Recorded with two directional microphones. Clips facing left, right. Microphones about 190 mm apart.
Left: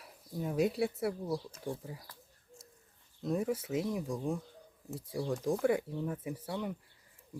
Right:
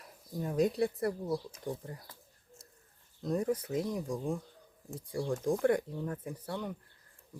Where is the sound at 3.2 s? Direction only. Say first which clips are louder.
Right 1 dB; centre (ahead or behind).